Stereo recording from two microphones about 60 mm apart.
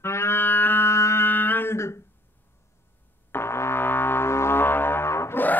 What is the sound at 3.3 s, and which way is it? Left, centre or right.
Music, left.